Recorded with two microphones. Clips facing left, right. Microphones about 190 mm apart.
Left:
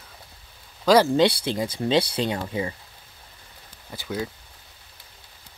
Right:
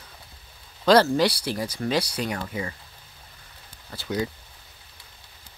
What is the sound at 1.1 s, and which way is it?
Speech, 25° left (ahead or behind).